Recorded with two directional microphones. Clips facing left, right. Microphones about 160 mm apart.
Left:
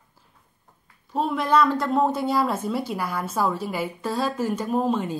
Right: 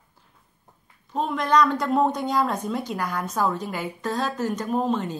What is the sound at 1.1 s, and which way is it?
A woman's voice, 5° left (ahead or behind).